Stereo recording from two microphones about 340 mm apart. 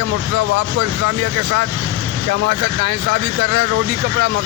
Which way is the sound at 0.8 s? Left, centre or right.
Right.